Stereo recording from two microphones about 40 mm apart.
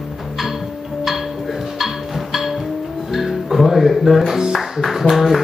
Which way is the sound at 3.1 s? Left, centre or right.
Centre.